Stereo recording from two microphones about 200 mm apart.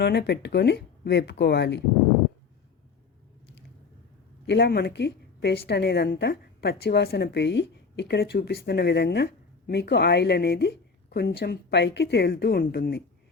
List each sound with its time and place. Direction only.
0.0 s a woman's voice: 55° left (ahead or behind)
4.4 s a woman's voice: 55° left (ahead or behind)